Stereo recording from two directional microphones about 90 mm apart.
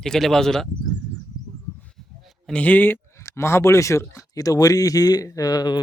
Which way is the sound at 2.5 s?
15° left (ahead or behind).